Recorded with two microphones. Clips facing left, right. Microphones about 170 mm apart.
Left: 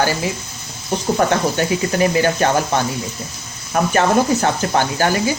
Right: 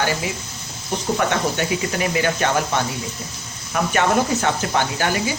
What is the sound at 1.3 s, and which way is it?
Speech, 35° left (ahead or behind).